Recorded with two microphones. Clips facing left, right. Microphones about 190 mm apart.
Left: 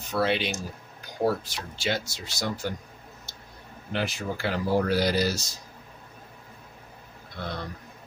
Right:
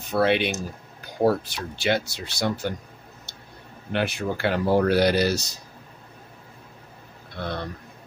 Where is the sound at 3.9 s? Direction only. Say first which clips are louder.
Right 4 dB; 60° right (ahead or behind).